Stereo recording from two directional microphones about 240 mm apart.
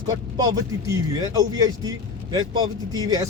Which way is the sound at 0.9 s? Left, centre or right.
Centre.